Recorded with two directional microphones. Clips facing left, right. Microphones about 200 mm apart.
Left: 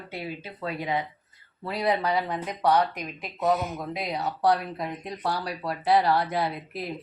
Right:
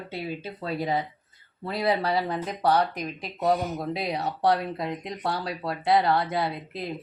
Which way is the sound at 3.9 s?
25° right (ahead or behind).